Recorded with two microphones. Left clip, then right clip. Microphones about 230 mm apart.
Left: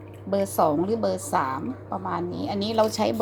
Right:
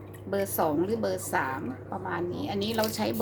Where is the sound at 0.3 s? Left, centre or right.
Centre.